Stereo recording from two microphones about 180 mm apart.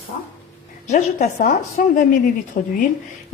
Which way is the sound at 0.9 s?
40° left (ahead or behind).